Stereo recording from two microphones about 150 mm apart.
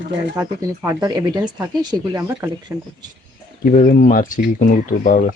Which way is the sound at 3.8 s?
55° left (ahead or behind).